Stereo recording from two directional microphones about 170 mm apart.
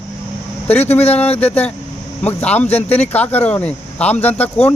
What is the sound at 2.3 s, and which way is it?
Speech, 10° left (ahead or behind).